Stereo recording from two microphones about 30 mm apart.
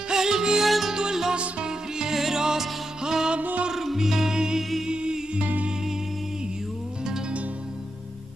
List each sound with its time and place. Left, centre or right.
0.1 s music: centre
0.7 s music: centre
0.9 s music: centre
1.3 s music: right
1.7 s music: right
3.7 s music: centre
4.8 s music: right